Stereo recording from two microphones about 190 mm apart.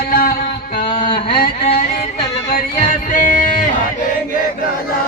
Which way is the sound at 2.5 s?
45° left (ahead or behind).